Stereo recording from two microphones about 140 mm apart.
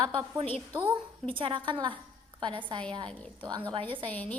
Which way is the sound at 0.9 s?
40° right (ahead or behind).